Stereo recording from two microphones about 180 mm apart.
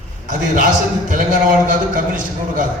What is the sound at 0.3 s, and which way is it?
Speech, 45° right (ahead or behind).